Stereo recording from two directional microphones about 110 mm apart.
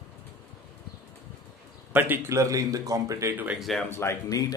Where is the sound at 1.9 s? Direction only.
20° right (ahead or behind).